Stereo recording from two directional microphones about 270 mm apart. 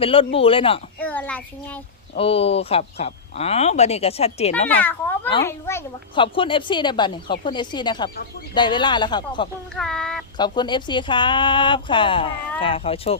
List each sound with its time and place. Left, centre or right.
0.0 s speech: centre
0.9 s a child's voice: centre
2.1 s speech: left
4.7 s a child's voice: centre
9.7 s a child's voice: centre
10.3 s a child's voice: centre